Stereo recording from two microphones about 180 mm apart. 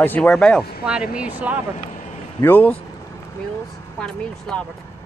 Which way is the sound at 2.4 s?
10° left (ahead or behind).